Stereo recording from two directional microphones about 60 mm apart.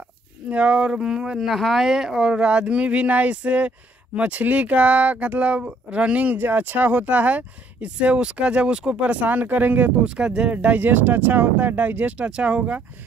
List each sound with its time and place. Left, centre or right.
0.5 s speech: centre
10.0 s speech: centre